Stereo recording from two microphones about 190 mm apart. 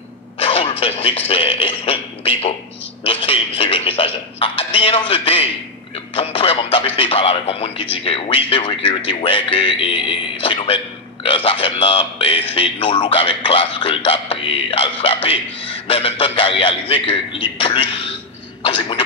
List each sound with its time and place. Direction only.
0.4 s speech: 30° left (ahead or behind)